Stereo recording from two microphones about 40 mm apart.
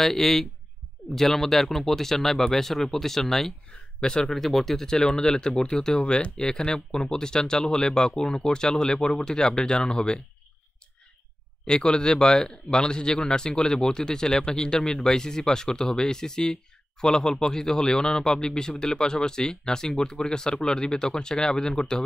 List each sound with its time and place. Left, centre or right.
0.0 s speech: centre
3.7 s speech: centre
4.4 s speech: centre
5.0 s speech: left
11.6 s speech: centre